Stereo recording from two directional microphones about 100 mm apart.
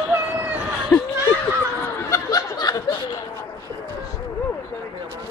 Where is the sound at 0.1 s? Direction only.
20° right (ahead or behind).